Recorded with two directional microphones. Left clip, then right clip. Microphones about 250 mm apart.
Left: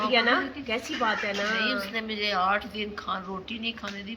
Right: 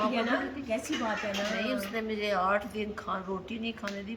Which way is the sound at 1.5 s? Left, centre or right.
Centre.